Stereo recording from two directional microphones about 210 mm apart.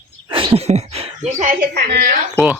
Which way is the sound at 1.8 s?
40° right (ahead or behind).